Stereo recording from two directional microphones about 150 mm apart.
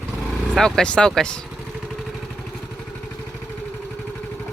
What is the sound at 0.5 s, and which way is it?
Speech, 5° left (ahead or behind).